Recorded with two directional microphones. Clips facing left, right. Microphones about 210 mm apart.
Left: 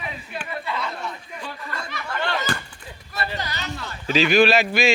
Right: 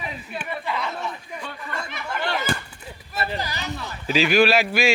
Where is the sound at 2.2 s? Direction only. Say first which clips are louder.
Even; 10° right (ahead or behind).